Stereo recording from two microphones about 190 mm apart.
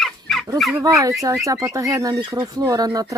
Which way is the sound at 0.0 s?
Centre (ahead or behind).